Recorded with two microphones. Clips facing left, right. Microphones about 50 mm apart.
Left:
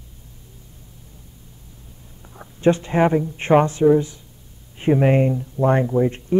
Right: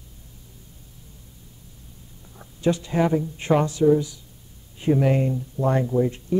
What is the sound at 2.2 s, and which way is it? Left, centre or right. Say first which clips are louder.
Speech: left 3 dB; left.